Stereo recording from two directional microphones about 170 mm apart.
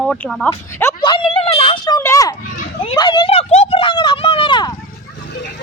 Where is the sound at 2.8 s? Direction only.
30° left (ahead or behind).